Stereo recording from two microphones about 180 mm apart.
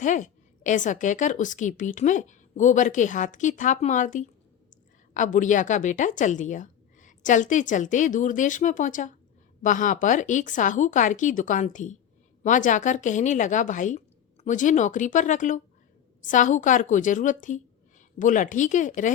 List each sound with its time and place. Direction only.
0.0 s a woman's voice: 45° left (ahead or behind)